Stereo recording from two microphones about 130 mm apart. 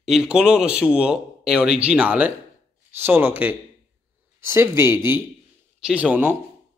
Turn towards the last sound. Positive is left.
turn(degrees=-15)  # may be behind; listen again after turning